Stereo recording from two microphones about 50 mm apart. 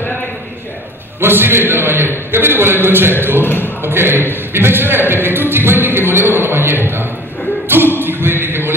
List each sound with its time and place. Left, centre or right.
1.2 s a man's voice: right
3.4 s speech: left
3.8 s a man's voice: right
4.3 s a sound: right
7.6 s music: right